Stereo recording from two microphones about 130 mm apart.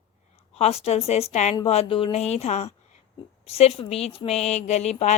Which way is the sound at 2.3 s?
55° left (ahead or behind).